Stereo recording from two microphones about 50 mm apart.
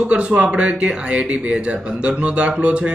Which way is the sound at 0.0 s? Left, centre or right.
Right.